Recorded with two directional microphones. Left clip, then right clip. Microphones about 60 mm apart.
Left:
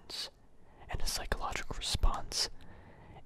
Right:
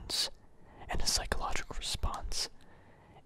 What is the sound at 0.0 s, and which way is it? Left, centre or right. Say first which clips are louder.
Speech: right 8 dB; right.